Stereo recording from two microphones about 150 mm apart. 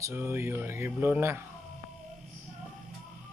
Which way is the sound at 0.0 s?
15° right (ahead or behind).